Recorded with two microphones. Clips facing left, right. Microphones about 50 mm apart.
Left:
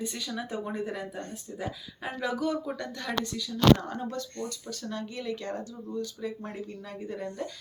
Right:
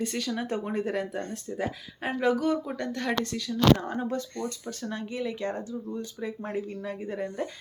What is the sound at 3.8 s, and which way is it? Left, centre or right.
Speech, right.